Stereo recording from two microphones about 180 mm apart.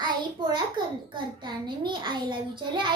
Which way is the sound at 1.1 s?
25° right (ahead or behind).